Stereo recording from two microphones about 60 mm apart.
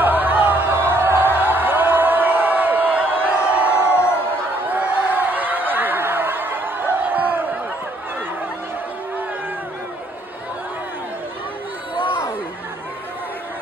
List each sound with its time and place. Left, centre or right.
0.0 s music: right
3.7 s crowd: left
4.6 s a sound: right